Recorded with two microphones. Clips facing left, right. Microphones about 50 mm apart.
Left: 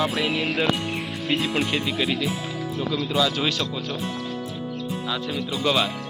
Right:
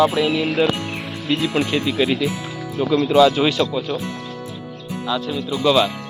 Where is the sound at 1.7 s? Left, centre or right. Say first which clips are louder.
Right 4 dB; centre.